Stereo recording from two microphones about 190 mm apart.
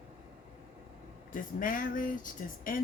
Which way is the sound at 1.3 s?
45° left (ahead or behind).